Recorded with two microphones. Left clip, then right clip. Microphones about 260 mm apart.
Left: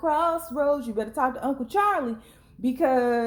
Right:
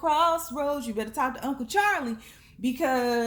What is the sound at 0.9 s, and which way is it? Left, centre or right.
Speech, right.